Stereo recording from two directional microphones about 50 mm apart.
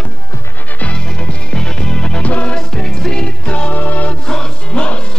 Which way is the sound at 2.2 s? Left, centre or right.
Left.